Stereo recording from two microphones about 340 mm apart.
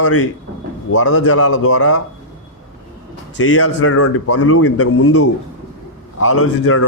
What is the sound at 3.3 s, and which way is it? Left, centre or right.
Speech, left.